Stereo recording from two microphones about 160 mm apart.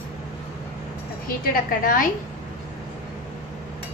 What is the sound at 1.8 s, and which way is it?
Speech, 60° left (ahead or behind).